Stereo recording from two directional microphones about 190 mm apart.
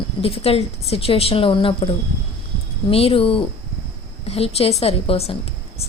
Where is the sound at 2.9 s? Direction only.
30° left (ahead or behind).